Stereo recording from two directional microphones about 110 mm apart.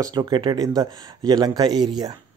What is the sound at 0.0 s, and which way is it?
Speech, 40° right (ahead or behind).